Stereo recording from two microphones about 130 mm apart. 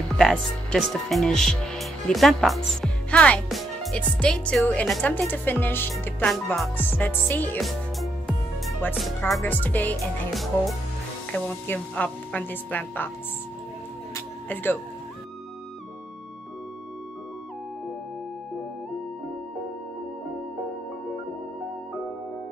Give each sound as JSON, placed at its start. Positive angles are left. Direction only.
{"t": 0.2, "sound": "a woman's voice", "side_deg": 5}
{"t": 6.3, "sound": "speech", "side_deg": 0}
{"t": 6.8, "sound": "a woman's voice", "side_deg": 15}
{"t": 7.6, "sound": "music", "side_deg": 0}
{"t": 9.4, "sound": "a woman's voice", "side_deg": 15}
{"t": 10.3, "sound": "speech", "side_deg": 0}
{"t": 11.3, "sound": "a woman's voice", "side_deg": 10}
{"t": 14.1, "sound": "music", "side_deg": 15}